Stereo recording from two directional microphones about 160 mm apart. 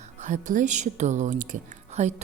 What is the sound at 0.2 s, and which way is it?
Speech, 55° right (ahead or behind).